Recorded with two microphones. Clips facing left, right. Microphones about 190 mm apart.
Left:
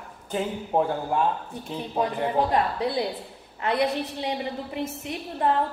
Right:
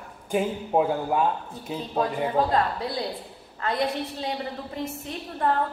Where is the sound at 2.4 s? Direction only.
15° left (ahead or behind).